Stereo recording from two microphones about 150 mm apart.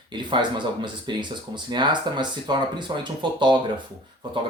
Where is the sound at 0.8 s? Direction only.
30° right (ahead or behind).